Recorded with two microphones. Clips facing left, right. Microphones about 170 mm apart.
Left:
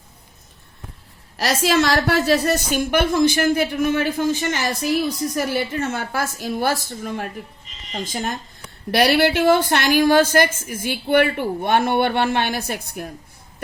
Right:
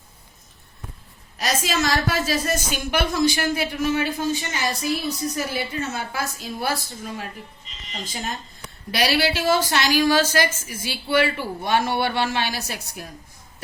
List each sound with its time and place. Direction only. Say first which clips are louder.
1.4 s a woman's voice: left 5 dB; 60° left (ahead or behind)